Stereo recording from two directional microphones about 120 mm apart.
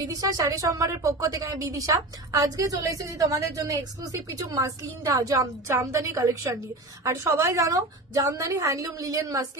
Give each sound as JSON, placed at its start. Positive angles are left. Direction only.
{"t": 0.0, "sound": "speech", "side_deg": -30}